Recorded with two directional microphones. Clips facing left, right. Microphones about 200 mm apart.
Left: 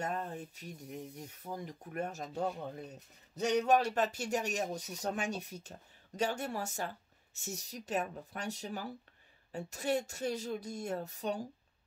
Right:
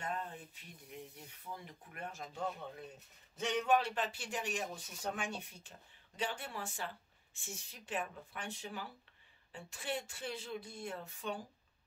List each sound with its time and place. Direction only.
0.0 s speech: 45° left (ahead or behind)